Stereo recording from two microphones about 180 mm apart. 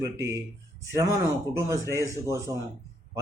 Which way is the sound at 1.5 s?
20° right (ahead or behind).